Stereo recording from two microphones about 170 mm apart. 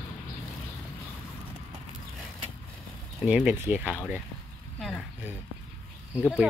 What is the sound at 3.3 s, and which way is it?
Speech, 10° right (ahead or behind).